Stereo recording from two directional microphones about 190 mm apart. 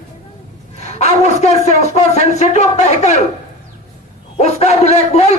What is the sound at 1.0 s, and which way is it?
A man's voice, 35° left (ahead or behind).